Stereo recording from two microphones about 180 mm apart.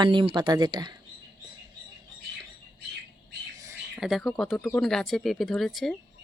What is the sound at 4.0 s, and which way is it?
Speech, centre (ahead or behind).